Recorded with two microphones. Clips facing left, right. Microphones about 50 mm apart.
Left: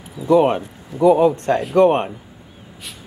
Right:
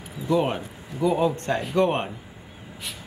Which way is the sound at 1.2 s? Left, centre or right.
Left.